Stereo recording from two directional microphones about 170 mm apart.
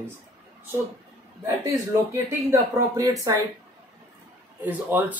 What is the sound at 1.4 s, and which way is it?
Speech, 20° right (ahead or behind).